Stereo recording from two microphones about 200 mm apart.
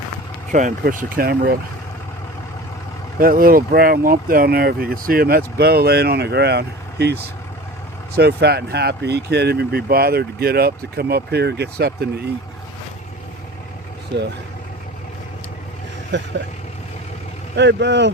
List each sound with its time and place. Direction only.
0.5 s speech: 40° right (ahead or behind)
3.2 s speech: 45° right (ahead or behind)
16.1 s speech: 65° right (ahead or behind)
17.6 s speech: 60° right (ahead or behind)